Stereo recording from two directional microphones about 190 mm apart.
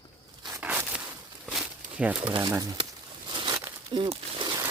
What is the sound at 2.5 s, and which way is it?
Speech, 20° right (ahead or behind).